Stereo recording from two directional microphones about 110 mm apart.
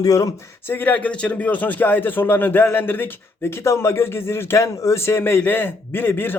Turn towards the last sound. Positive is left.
turn(degrees=20)  # may be behind; listen again after turning